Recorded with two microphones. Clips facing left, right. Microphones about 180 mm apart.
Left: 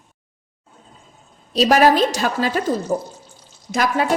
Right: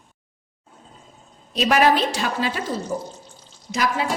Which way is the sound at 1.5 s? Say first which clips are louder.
Left 4 dB; 40° left (ahead or behind).